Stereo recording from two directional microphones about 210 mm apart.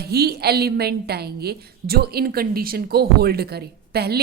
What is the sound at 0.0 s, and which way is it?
Speech, 50° right (ahead or behind).